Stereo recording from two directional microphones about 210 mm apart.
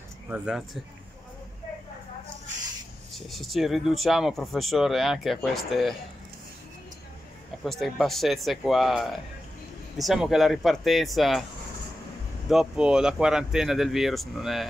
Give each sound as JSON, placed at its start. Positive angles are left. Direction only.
{"t": 0.3, "sound": "speech", "side_deg": -5}
{"t": 3.2, "sound": "speech", "side_deg": 0}
{"t": 7.6, "sound": "speech", "side_deg": 0}
{"t": 12.4, "sound": "speech", "side_deg": -5}